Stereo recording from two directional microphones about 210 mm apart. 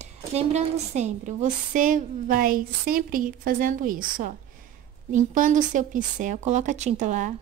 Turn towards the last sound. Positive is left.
turn(degrees=-35)  # may be behind; listen again after turning